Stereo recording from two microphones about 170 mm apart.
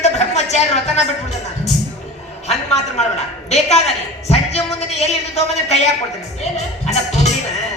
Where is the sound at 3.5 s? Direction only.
40° left (ahead or behind).